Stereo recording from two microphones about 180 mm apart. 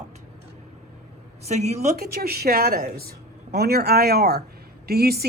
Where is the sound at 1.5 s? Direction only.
40° right (ahead or behind).